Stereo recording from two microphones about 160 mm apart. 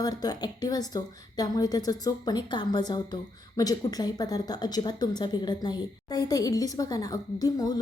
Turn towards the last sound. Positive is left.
turn(degrees=25)  # may be behind; listen again after turning